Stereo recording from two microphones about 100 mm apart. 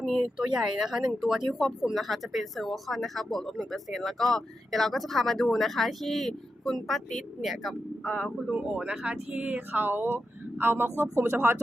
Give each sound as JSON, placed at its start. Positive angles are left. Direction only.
{"t": 0.0, "sound": "speech", "side_deg": 0}
{"t": 8.0, "sound": "speech", "side_deg": 10}
{"t": 8.4, "sound": "speech", "side_deg": -10}